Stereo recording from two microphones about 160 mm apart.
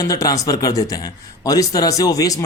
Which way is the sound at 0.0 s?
20° left (ahead or behind).